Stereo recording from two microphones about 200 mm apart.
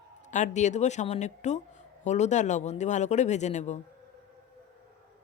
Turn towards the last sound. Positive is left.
turn(degrees=35)  # may be behind; listen again after turning